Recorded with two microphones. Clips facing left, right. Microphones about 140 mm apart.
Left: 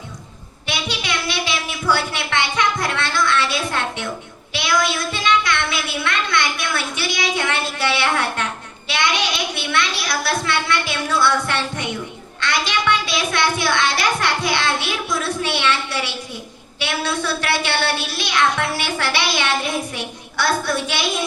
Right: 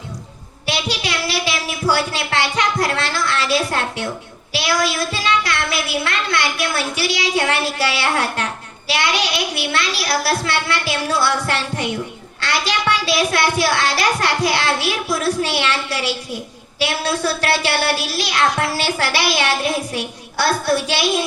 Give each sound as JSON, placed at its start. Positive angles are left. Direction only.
{"t": 0.7, "sound": "child singing", "side_deg": -35}
{"t": 1.9, "sound": "a sound", "side_deg": -35}
{"t": 4.5, "sound": "a child's voice", "side_deg": -35}
{"t": 7.8, "sound": "music", "side_deg": -35}